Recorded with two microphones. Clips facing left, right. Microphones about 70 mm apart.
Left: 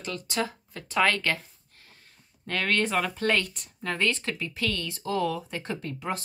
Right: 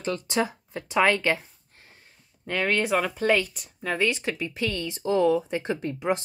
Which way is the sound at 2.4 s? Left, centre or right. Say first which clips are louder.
Right 2 dB; centre.